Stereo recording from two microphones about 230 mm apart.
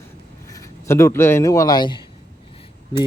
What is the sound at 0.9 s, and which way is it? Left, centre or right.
A man's voice, centre.